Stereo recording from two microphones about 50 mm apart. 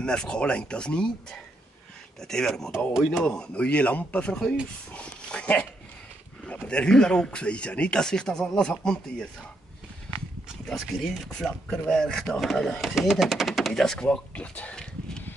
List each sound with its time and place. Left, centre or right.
0.0 s speech: centre
2.2 s speech: centre; by 4.3 s left
4.3 s speech: centre
4.9 s dog: left
6.4 s speech: left
10.1 s horse: left
10.7 s speech: centre
12.9 s speech: centre
13.7 s speech: centre
14.3 s a sound: left